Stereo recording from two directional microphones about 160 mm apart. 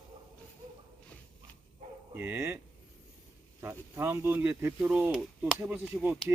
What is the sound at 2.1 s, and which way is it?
Bow-wow, 15° right (ahead or behind).